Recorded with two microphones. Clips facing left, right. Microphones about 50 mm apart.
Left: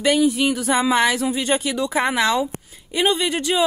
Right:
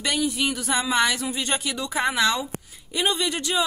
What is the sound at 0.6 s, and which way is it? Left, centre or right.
Speech, centre.